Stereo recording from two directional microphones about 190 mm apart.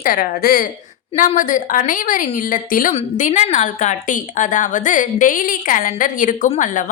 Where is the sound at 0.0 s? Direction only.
45° left (ahead or behind).